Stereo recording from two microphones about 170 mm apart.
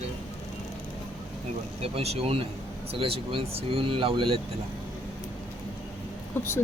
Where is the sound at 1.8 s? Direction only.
35° right (ahead or behind).